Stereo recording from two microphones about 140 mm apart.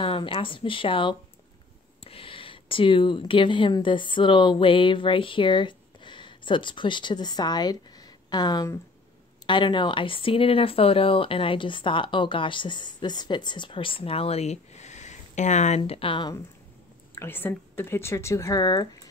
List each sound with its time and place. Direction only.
0.0 s speech: 40° left (ahead or behind); by 15.8 s 55° left (ahead or behind)
15.8 s speech: 40° left (ahead or behind)
17.1 s a woman's voice: 15° left (ahead or behind)